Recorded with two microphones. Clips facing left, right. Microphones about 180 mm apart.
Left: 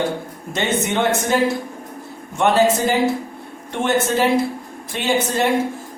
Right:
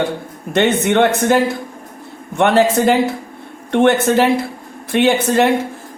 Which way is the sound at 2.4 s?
60° right (ahead or behind).